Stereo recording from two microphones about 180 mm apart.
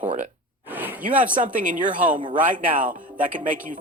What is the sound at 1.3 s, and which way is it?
Speech, 45° right (ahead or behind).